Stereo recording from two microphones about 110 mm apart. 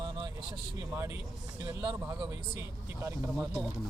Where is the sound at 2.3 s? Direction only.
25° right (ahead or behind).